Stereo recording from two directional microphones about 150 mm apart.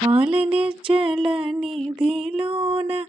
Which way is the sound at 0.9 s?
35° right (ahead or behind).